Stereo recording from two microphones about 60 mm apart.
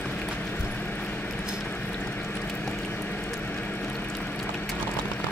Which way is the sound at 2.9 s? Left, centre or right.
Left.